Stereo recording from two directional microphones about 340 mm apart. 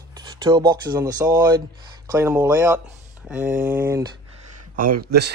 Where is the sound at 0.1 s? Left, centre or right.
Centre.